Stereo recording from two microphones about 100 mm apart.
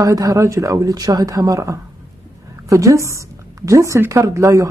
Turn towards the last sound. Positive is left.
turn(degrees=-30)  # may be behind; listen again after turning